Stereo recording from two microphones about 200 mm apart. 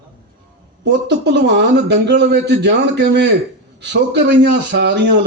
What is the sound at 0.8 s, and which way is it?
Speech, 60° right (ahead or behind).